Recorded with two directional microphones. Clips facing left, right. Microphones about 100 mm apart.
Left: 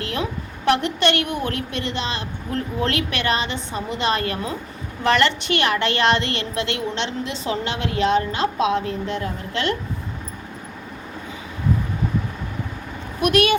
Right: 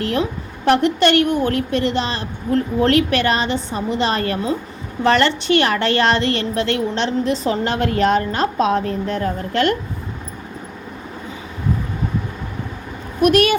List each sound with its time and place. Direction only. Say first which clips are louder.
0.0 s a woman's voice: right 5 dB; 35° right (ahead or behind)
13.2 s a woman's voice: right 4 dB; 40° right (ahead or behind)